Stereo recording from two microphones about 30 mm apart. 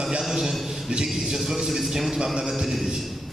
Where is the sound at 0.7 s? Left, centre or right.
Centre.